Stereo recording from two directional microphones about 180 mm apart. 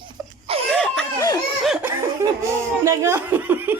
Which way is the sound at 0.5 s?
30° right (ahead or behind).